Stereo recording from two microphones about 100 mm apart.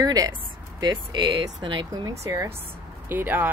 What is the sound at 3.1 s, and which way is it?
Speech, 20° right (ahead or behind).